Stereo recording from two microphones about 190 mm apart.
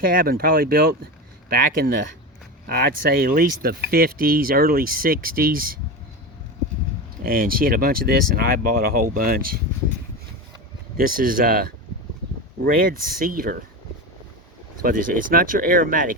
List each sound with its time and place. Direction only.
0.0 s speech: 50° right (ahead or behind)
7.3 s speech: 50° right (ahead or behind)
10.9 s speech: 50° right (ahead or behind)
14.8 s speech: 50° right (ahead or behind)